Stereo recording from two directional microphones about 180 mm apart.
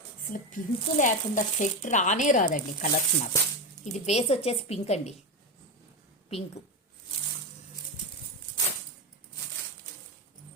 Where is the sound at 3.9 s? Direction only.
35° left (ahead or behind).